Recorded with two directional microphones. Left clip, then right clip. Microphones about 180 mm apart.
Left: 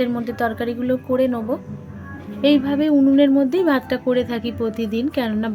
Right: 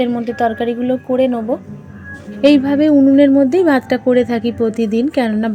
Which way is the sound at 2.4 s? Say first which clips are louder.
Right 6 dB; 30° right (ahead or behind).